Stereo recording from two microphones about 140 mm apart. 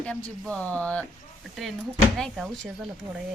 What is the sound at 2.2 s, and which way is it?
Speech, centre (ahead or behind).